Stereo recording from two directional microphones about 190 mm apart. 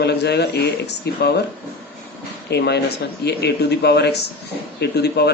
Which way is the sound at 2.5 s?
60° left (ahead or behind).